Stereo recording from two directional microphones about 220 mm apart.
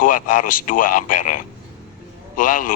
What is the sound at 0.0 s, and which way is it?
Speech, 40° left (ahead or behind).